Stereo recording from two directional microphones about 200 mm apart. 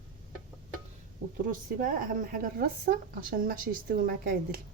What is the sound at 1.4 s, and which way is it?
A woman's voice, 45° right (ahead or behind).